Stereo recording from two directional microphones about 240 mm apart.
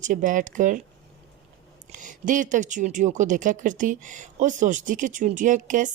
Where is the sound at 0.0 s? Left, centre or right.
Right.